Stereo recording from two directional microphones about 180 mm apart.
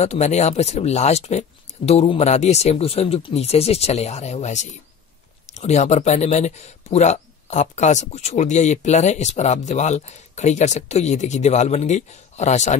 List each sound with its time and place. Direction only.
0.0 s speech: 35° left (ahead or behind)